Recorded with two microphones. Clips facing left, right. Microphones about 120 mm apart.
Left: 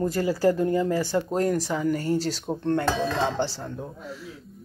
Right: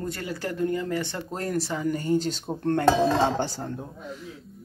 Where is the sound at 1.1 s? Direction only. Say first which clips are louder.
Left 6 dB; 10° left (ahead or behind).